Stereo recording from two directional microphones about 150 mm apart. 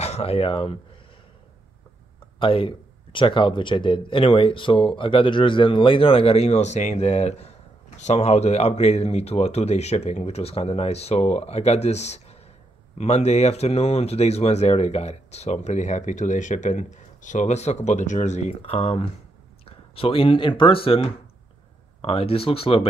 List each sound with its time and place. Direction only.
0.0 s speech: 45° left (ahead or behind)
2.3 s speech: 35° left (ahead or behind)